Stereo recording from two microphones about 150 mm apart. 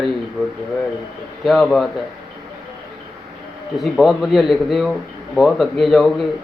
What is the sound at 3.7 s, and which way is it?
A man's voice, centre (ahead or behind).